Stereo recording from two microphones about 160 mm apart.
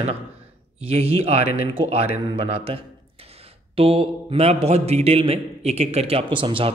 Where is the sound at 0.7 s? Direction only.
40° right (ahead or behind).